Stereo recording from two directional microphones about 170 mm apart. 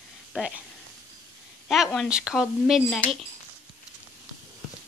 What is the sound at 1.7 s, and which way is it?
A woman's voice, centre (ahead or behind).